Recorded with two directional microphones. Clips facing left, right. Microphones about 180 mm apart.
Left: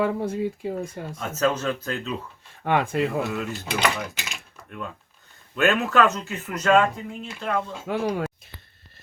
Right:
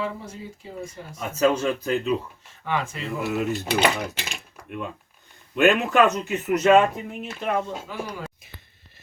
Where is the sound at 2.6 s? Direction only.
55° left (ahead or behind).